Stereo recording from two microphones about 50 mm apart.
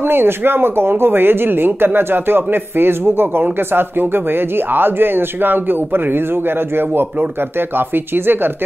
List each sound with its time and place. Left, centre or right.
0.1 s speech: right
7.7 s speech: right